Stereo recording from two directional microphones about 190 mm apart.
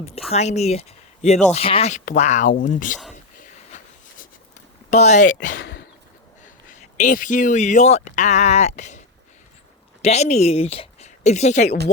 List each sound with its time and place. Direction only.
0.3 s speech: 35° left (ahead or behind)
3.7 s a sound: 40° left (ahead or behind)
4.9 s speech: 35° left (ahead or behind)
5.5 s a sound: 65° left (ahead or behind)
6.4 s speech: 40° left (ahead or behind)
10.0 s a woman's voice: 35° left (ahead or behind)